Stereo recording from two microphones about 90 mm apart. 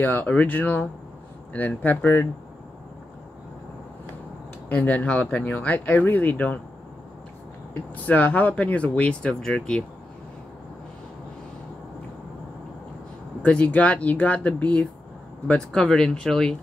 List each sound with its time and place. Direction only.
0.0 s speech: 20° left (ahead or behind)
4.6 s speech: 15° left (ahead or behind)
7.9 s speech: 20° left (ahead or behind)
13.4 s speech: 15° left (ahead or behind)